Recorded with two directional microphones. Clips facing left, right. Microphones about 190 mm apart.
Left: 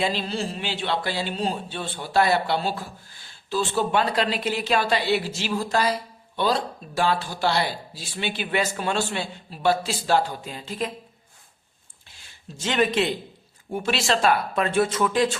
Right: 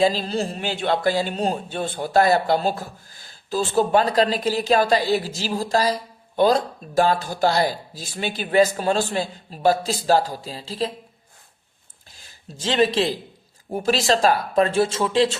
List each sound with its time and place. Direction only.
0.0 s speech: 40° right (ahead or behind)
12.1 s speech: 40° right (ahead or behind)